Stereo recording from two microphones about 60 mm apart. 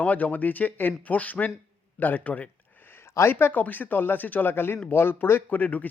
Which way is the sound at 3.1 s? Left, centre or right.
Left.